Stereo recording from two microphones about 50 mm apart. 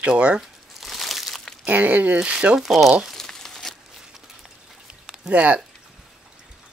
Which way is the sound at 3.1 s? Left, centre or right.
Centre.